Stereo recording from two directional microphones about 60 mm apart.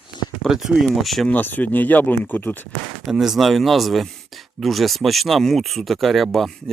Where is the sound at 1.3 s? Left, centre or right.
Left.